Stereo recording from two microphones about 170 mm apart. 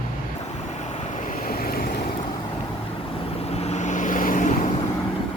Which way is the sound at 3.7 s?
45° left (ahead or behind).